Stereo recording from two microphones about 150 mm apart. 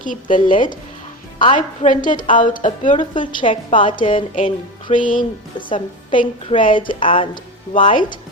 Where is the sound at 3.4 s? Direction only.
35° left (ahead or behind).